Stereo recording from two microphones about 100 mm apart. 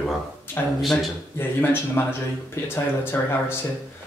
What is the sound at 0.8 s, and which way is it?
Speech, centre (ahead or behind).